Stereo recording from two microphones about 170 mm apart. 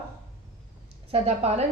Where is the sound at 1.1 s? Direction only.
35° right (ahead or behind).